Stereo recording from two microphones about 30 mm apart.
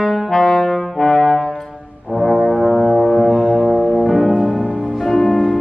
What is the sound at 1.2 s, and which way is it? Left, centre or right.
Brass instrument, centre.